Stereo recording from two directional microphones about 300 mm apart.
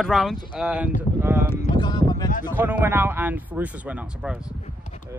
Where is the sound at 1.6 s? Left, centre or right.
Centre.